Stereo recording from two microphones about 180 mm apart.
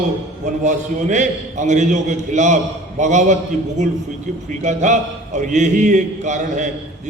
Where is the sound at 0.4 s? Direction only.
40° right (ahead or behind).